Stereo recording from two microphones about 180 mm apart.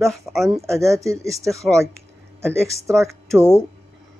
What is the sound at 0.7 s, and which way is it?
Speech, 15° right (ahead or behind).